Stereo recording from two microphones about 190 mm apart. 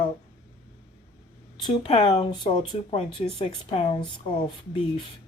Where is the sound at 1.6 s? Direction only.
25° left (ahead or behind).